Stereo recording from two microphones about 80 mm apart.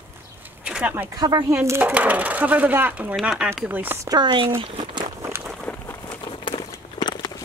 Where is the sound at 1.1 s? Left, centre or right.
Right.